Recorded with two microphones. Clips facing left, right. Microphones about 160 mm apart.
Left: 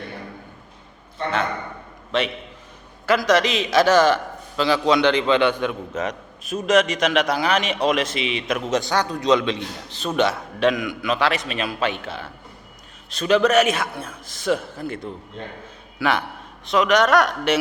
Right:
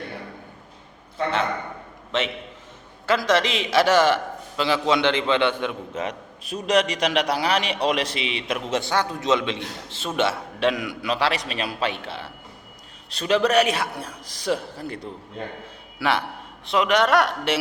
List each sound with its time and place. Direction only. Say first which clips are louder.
3.1 s a man's voice: left 3 dB; 25° right (ahead or behind)